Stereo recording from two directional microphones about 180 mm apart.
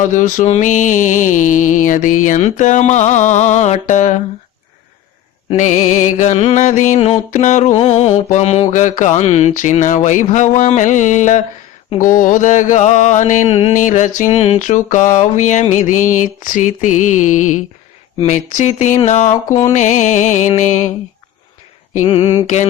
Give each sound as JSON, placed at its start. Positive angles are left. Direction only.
{"t": 0.0, "sound": "mantra", "side_deg": 45}
{"t": 5.5, "sound": "mantra", "side_deg": 40}
{"t": 22.0, "sound": "mantra", "side_deg": 25}